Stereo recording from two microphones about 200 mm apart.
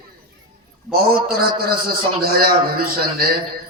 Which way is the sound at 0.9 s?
50° right (ahead or behind).